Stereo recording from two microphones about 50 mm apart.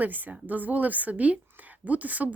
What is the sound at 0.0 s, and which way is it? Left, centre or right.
A woman's voice, right.